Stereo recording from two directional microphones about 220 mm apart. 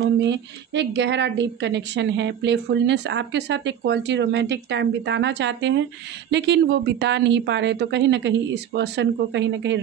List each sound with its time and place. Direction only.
0.2 s a woman's voice: 55° right (ahead or behind)